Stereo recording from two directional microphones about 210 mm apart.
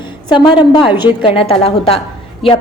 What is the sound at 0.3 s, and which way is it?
A woman's voice, 20° left (ahead or behind).